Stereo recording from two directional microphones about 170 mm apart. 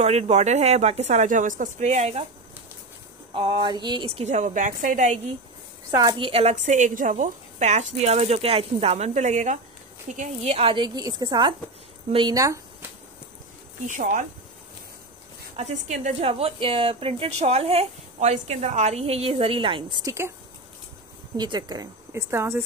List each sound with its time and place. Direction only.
0.0 s speech: 40° right (ahead or behind)
3.3 s speech: 25° right (ahead or behind); by 5.2 s 45° right (ahead or behind)
5.9 s speech: 25° right (ahead or behind)
13.8 s speech: 50° right (ahead or behind)
15.5 s speech: 40° right (ahead or behind); by 20.3 s 15° right (ahead or behind)
21.4 s speech: 25° right (ahead or behind)